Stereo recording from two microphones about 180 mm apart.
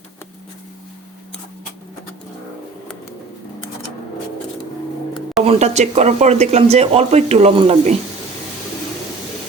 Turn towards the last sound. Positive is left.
turn(degrees=-35)  # may be behind; listen again after turning